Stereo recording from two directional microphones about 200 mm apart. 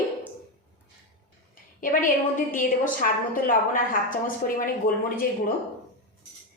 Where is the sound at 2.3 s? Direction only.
45° left (ahead or behind).